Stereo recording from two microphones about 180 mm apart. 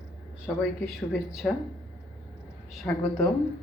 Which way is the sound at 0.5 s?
5° left (ahead or behind).